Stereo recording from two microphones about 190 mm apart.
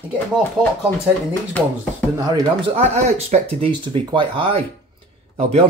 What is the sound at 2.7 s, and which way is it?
Speech, 35° right (ahead or behind).